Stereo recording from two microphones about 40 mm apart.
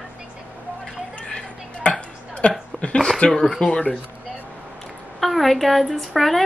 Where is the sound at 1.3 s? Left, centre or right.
Left.